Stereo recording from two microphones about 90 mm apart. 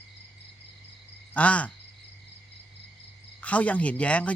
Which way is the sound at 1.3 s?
15° left (ahead or behind).